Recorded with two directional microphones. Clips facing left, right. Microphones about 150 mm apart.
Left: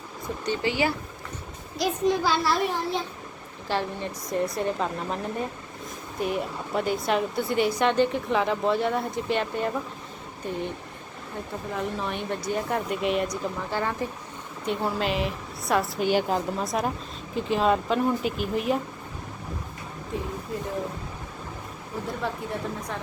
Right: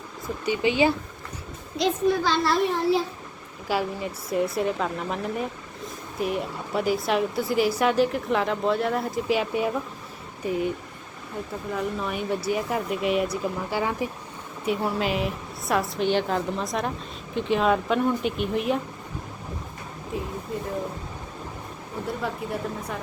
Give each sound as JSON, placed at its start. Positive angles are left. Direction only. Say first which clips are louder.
{"t": 0.4, "sound": "speech", "louder": "right 4 dB", "side_deg": -15}
{"t": 2.0, "sound": "speech", "louder": "left 1 dB", "side_deg": 10}
{"t": 11.7, "sound": "speech", "louder": "right 2 dB", "side_deg": 0}
{"t": 20.1, "sound": "a sound", "louder": "right 1 dB", "side_deg": 0}